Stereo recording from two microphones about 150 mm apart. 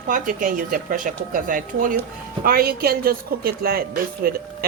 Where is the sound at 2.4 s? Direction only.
85° right.